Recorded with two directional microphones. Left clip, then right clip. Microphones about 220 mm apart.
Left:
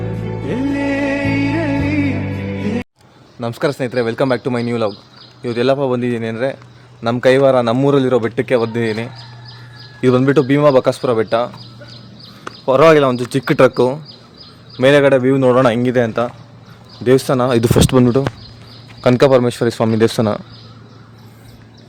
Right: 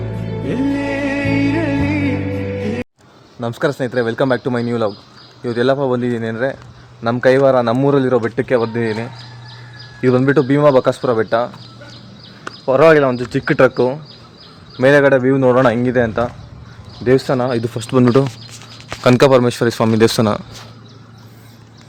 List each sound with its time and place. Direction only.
0.4 s music: centre (ahead or behind)
3.4 s a man's voice: centre (ahead or behind); by 14.0 s 20° left (ahead or behind)
14.8 s a man's voice: 10° left (ahead or behind)
17.4 s speech: 45° left (ahead or behind)
18.0 s speech: 10° right (ahead or behind)